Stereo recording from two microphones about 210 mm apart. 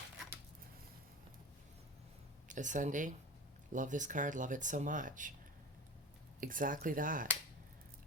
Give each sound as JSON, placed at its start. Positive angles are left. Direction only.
{"t": 2.5, "sound": "speech", "side_deg": -35}
{"t": 6.4, "sound": "speech", "side_deg": -40}